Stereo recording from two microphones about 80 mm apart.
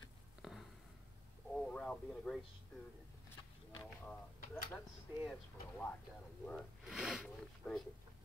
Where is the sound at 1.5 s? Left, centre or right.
Centre.